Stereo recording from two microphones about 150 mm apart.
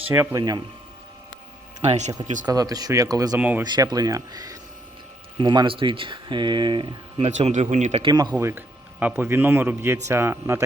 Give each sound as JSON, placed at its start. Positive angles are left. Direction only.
{"t": 0.1, "sound": "speech", "side_deg": -15}
{"t": 1.8, "sound": "speech", "side_deg": -50}
{"t": 2.5, "sound": "speech", "side_deg": -25}
{"t": 3.3, "sound": "speech", "side_deg": -10}
{"t": 3.6, "sound": "speech", "side_deg": -25}
{"t": 7.3, "sound": "speech", "side_deg": -50}
{"t": 8.0, "sound": "speech", "side_deg": -25}